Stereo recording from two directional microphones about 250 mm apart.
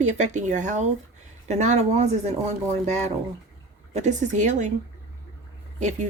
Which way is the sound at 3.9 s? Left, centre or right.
Right.